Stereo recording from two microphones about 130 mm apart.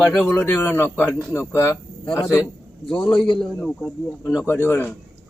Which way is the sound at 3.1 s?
40° left (ahead or behind).